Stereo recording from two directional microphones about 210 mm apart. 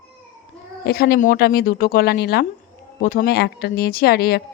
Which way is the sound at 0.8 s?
50° left (ahead or behind).